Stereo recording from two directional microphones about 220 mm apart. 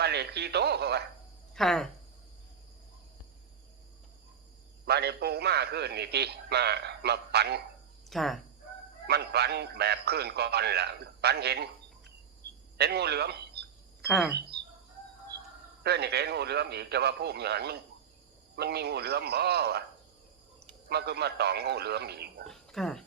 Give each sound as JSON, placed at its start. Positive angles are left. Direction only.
{"t": 0.0, "sound": "radio", "side_deg": -50}
{"t": 1.5, "sound": "speech", "side_deg": 0}
{"t": 4.9, "sound": "a man's voice", "side_deg": -45}
{"t": 8.1, "sound": "speech", "side_deg": 0}
{"t": 9.0, "sound": "a man's voice", "side_deg": -50}
{"t": 12.7, "sound": "a man's voice", "side_deg": -50}
{"t": 14.0, "sound": "speech", "side_deg": 0}
{"t": 15.8, "sound": "a man's voice", "side_deg": -50}
{"t": 20.9, "sound": "a man's voice", "side_deg": -50}
{"t": 22.4, "sound": "speech", "side_deg": 0}